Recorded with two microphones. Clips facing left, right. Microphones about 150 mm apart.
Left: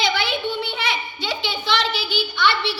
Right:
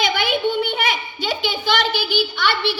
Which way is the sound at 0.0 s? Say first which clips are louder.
Right 3 dB; 50° right (ahead or behind).